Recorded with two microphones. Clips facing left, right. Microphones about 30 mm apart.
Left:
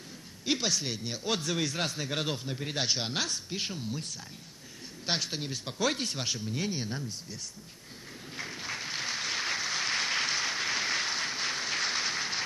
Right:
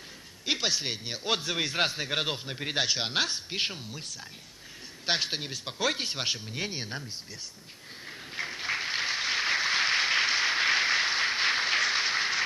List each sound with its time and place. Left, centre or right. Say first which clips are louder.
0.5 s a man's voice: right 1 dB; right
5.2 s a man's voice: right 3 dB; right
8.4 s applause: right 6 dB; right